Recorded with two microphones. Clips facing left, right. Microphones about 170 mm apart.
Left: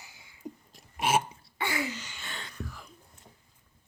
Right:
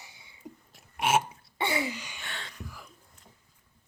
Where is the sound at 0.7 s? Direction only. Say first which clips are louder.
Right 1 dB; 5° right (ahead or behind).